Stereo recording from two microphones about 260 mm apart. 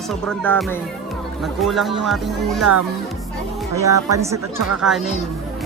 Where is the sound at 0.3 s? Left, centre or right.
Centre.